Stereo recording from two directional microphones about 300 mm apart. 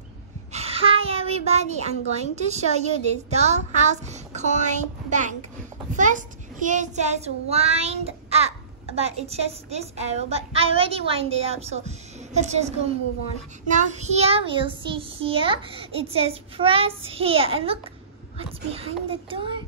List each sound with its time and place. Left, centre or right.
0.5 s a woman's voice: right